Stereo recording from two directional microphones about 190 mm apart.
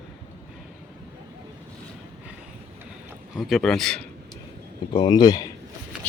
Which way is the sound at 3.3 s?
Centre (ahead or behind).